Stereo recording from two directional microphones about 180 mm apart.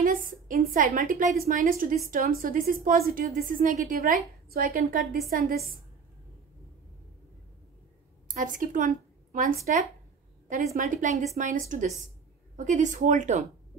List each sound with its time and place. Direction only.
0.0 s a woman's voice: 50° right (ahead or behind)
8.3 s a woman's voice: 45° right (ahead or behind)
10.8 s a woman's voice: 45° right (ahead or behind)